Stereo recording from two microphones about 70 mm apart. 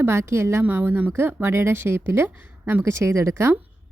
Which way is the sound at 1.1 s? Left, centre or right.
Right.